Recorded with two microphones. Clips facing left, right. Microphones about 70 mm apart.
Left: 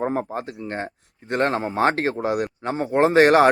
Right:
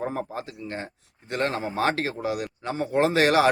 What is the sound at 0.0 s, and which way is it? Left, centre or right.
Speech, left.